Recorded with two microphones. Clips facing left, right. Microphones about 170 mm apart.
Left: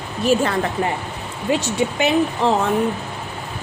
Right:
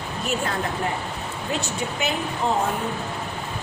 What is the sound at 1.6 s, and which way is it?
Speech, 90° left.